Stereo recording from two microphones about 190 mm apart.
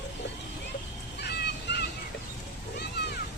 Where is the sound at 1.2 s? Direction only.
60° left (ahead or behind).